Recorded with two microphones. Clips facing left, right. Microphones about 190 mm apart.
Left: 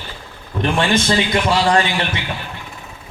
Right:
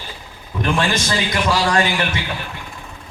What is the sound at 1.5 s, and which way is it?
Speech, 25° left (ahead or behind).